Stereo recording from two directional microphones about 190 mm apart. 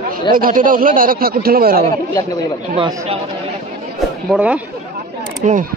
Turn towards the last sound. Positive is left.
turn(degrees=-40)  # may be behind; listen again after turning